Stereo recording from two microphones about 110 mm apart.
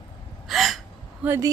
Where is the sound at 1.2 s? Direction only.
10° right (ahead or behind).